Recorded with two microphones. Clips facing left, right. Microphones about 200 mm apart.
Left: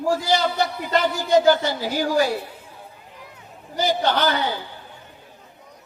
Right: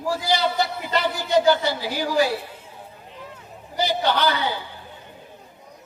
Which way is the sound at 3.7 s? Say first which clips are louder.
Left 1 dB; 45° left (ahead or behind).